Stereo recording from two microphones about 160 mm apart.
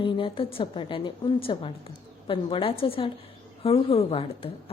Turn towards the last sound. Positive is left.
turn(degrees=35)  # may be behind; listen again after turning